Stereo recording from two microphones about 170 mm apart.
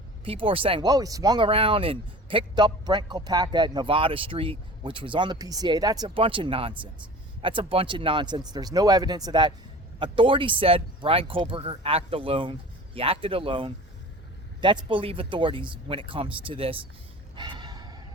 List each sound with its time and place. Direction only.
0.3 s a man's voice: 30° right (ahead or behind)
1.5 s a man's voice: 30° right (ahead or behind)
17.3 s music: 25° right (ahead or behind)